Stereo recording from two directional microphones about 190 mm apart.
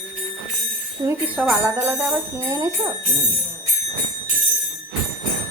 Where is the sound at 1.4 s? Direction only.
10° right (ahead or behind).